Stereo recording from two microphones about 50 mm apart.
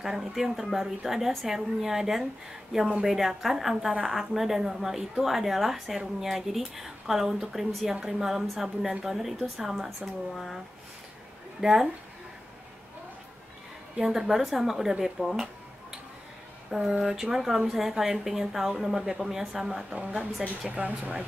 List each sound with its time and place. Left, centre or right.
0.0 s a woman's voice: centre
11.6 s speech: centre
13.9 s a woman's voice: centre
19.9 s speech: right